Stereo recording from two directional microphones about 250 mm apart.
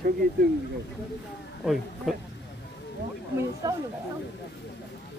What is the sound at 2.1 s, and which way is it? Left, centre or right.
Speech, centre.